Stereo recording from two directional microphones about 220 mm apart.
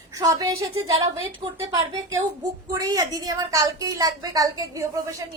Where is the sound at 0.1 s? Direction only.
15° right (ahead or behind).